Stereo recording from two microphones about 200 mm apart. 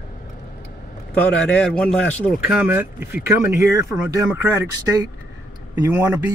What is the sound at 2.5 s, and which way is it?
Speech, 10° right (ahead or behind).